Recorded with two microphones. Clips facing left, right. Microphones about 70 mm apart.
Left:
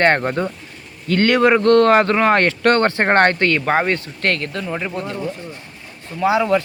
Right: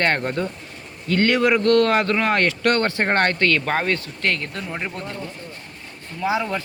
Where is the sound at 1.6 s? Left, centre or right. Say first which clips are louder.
Left 5 dB; left.